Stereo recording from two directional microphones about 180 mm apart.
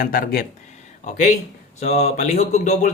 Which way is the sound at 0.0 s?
50° left (ahead or behind).